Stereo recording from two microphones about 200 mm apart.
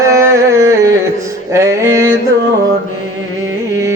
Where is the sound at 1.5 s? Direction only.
15° right (ahead or behind).